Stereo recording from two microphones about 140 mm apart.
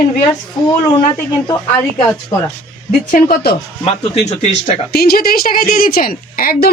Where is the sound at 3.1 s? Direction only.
75° left (ahead or behind).